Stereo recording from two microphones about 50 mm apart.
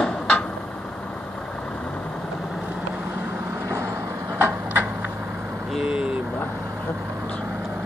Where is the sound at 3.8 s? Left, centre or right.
Right.